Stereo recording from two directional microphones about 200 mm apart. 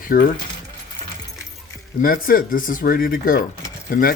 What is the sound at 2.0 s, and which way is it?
Speech, 45° left (ahead or behind).